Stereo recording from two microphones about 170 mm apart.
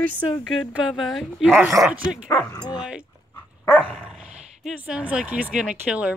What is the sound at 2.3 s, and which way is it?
Speech, 25° left (ahead or behind).